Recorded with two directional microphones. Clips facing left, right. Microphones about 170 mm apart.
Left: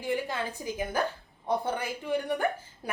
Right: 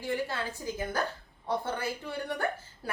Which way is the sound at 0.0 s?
15° left (ahead or behind).